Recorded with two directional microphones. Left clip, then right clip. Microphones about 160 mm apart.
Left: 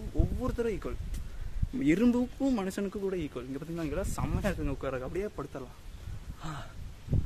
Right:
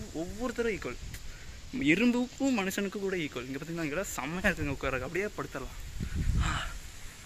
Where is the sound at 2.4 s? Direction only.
15° left (ahead or behind).